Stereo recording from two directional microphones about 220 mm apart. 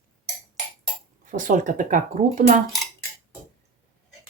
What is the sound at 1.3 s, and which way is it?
Speech, 35° right (ahead or behind).